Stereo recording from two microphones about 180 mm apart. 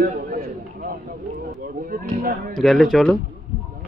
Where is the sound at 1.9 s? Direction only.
55° right (ahead or behind).